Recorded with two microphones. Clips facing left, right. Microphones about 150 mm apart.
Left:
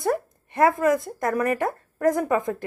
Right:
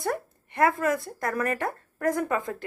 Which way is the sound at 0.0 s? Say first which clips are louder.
Left 5 dB; 20° left (ahead or behind).